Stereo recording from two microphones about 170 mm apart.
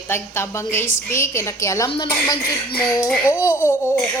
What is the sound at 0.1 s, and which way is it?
A woman's voice, 15° left (ahead or behind).